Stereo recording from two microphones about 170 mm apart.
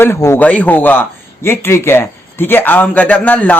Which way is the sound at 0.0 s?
15° left (ahead or behind).